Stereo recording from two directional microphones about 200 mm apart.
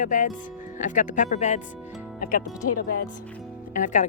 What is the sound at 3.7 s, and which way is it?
Speech, 40° left (ahead or behind).